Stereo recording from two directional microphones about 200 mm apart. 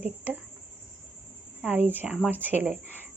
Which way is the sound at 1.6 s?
10° right (ahead or behind).